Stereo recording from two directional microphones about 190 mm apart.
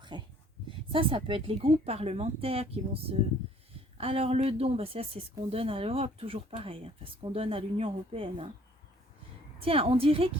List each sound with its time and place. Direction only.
0.1 s speech: 25° right (ahead or behind)
9.6 s speech: 30° right (ahead or behind)